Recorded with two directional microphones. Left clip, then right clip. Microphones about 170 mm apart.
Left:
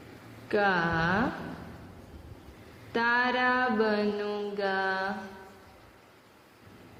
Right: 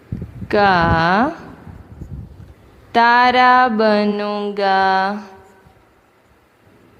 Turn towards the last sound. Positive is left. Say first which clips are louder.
# right 14 dB
turn(degrees=-60)  # may be behind; listen again after turning